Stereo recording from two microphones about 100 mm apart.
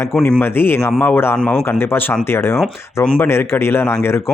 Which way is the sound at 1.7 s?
20° left (ahead or behind).